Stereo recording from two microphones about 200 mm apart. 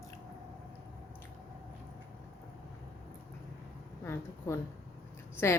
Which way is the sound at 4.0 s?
15° left (ahead or behind).